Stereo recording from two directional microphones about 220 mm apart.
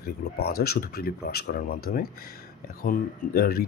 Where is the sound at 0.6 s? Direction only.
45° left (ahead or behind).